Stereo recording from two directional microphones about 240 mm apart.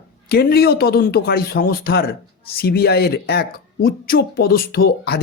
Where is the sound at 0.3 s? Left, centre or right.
Left.